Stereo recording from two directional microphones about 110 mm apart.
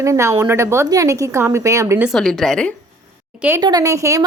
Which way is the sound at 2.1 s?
5° left (ahead or behind).